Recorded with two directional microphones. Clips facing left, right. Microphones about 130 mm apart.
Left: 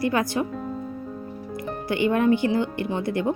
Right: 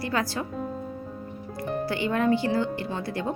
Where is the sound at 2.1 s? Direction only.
20° left (ahead or behind).